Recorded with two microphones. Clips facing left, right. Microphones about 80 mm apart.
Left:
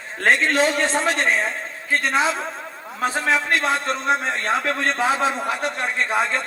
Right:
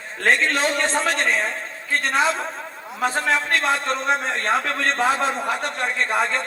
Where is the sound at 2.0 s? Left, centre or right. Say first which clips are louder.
Right 1 dB; right.